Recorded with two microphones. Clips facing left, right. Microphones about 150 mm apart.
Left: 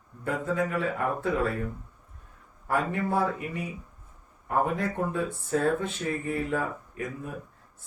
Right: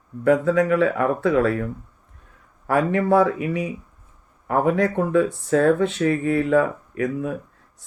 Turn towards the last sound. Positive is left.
turn(degrees=-90)